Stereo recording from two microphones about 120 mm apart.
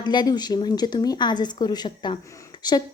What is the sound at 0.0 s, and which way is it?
A woman's voice, 40° left (ahead or behind).